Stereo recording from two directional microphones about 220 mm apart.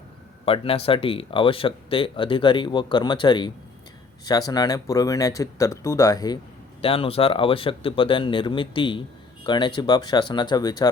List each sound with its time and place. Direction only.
0.4 s speech: 25° left (ahead or behind)